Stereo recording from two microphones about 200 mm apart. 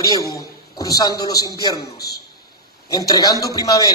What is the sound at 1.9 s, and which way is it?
Speech, 50° left (ahead or behind).